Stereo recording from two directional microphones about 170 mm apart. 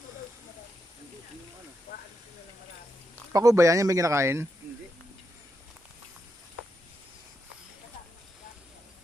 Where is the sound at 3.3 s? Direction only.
20° right (ahead or behind).